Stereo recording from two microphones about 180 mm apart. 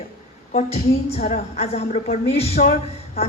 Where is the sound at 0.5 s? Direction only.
35° left (ahead or behind).